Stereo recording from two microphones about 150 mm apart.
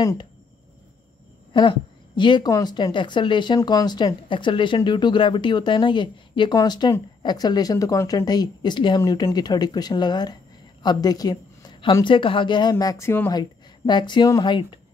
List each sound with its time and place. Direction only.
0.0 s a woman's voice: 20° left (ahead or behind)
1.5 s a woman's voice: 30° left (ahead or behind); by 13.3 s 15° left (ahead or behind)
13.3 s a woman's voice: 30° left (ahead or behind)